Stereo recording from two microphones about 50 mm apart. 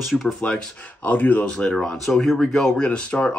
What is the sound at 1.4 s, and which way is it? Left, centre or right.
Speech, centre.